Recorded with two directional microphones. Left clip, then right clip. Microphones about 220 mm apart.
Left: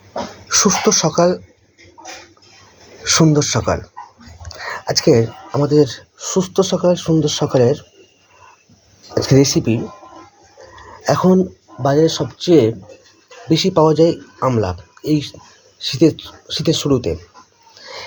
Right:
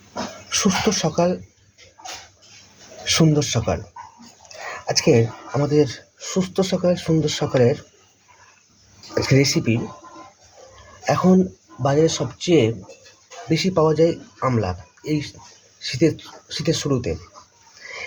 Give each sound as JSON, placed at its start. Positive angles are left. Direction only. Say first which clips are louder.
{"t": 0.6, "sound": "speech", "louder": "left 6 dB", "side_deg": 15}
{"t": 3.0, "sound": "a sound", "louder": "left 5 dB", "side_deg": 0}
{"t": 3.7, "sound": "speech", "louder": "left 5 dB", "side_deg": 15}
{"t": 9.1, "sound": "speech", "louder": "left 5 dB", "side_deg": 15}
{"t": 11.0, "sound": "speech", "louder": "left 4 dB", "side_deg": 20}